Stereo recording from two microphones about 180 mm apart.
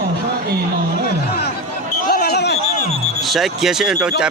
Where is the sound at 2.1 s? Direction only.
60° left (ahead or behind).